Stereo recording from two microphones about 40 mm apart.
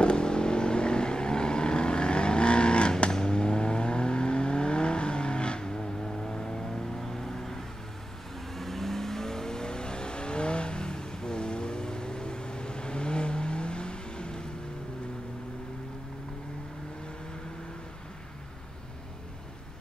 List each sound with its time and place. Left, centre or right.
0.0 s vehicle: left